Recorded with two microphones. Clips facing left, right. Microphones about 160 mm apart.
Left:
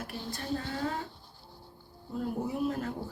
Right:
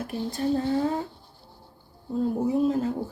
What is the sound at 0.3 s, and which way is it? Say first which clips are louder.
Speech: right 11 dB; 25° right (ahead or behind).